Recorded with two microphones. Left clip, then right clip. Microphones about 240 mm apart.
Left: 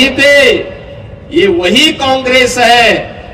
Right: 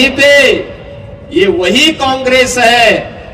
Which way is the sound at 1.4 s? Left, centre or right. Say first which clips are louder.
Left 1 dB; right.